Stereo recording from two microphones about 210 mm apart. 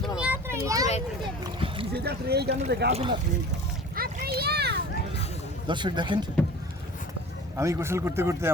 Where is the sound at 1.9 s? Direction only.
50° right (ahead or behind).